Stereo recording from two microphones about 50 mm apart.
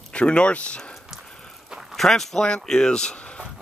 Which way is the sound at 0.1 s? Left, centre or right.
Left.